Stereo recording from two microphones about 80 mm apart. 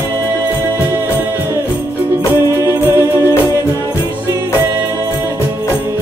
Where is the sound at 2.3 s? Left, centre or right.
Right.